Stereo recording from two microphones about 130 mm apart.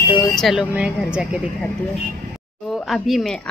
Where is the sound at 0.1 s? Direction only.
35° left (ahead or behind).